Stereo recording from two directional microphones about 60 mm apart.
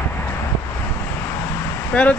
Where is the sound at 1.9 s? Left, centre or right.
Left.